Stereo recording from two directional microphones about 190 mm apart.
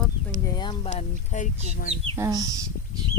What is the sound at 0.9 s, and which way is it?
Speech, 40° left (ahead or behind).